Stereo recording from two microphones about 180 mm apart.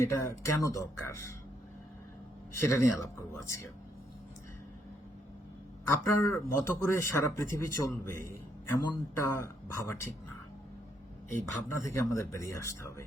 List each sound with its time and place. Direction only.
0.0 s speech: 15° left (ahead or behind)
2.6 s speech: 15° left (ahead or behind)
5.9 s speech: 15° left (ahead or behind)
11.3 s speech: 15° left (ahead or behind)